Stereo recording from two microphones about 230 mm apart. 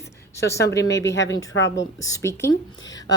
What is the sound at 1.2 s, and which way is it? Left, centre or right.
Speech, left.